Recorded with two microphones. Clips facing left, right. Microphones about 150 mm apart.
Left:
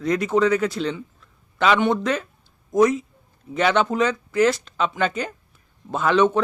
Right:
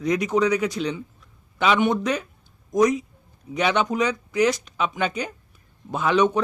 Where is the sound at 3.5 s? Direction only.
10° right (ahead or behind).